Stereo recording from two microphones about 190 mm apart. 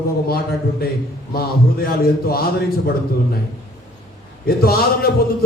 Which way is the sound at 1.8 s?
55° left (ahead or behind).